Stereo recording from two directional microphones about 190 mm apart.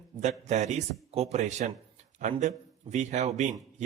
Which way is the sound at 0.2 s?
35° right (ahead or behind).